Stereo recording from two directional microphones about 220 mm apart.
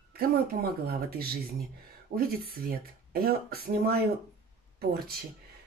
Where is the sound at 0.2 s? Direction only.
45° right (ahead or behind).